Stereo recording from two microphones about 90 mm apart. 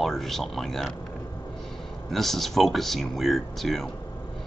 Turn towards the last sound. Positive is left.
turn(degrees=0)  # may be behind; listen again after turning